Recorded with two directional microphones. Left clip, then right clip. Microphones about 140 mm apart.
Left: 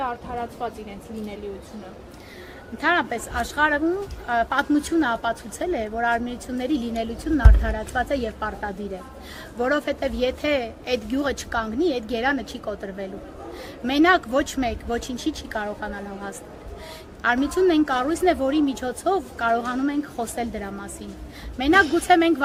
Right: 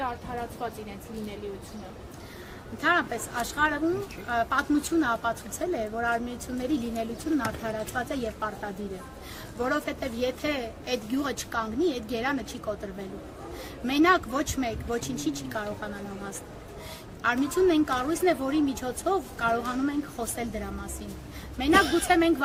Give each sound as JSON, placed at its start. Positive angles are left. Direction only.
{"t": 0.0, "sound": "a woman's voice", "side_deg": -30}
{"t": 2.8, "sound": "a woman's voice", "side_deg": -40}